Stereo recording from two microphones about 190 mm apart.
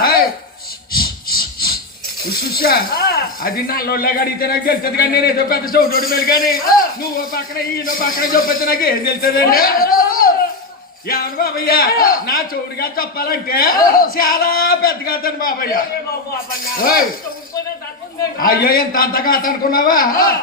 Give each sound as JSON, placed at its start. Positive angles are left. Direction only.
{"t": 0.0, "sound": "a sound", "side_deg": 50}
{"t": 0.9, "sound": "rub", "side_deg": 50}
{"t": 2.3, "sound": "a man's voice", "side_deg": 50}
{"t": 18.3, "sound": "a man's voice", "side_deg": 50}